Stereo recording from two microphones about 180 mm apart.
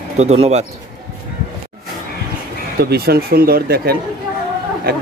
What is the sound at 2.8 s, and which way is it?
Speech, 60° right (ahead or behind).